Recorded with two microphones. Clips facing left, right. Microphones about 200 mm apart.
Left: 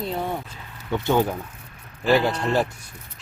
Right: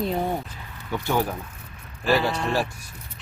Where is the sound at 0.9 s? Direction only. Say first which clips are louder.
Left 4 dB; 20° left (ahead or behind).